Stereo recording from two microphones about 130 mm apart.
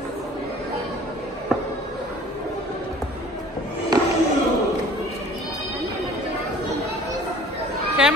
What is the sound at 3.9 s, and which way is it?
Music, 30° right (ahead or behind).